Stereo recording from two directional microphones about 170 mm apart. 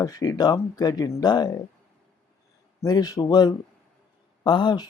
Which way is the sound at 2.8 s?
20° left (ahead or behind).